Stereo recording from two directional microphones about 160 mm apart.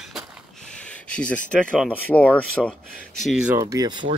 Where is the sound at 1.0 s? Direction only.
10° left (ahead or behind).